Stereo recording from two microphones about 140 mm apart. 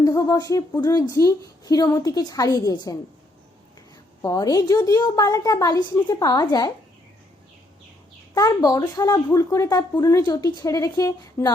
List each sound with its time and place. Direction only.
0.0 s speech: 25° left (ahead or behind)
4.2 s speech: 25° left (ahead or behind)
8.4 s speech: 25° left (ahead or behind)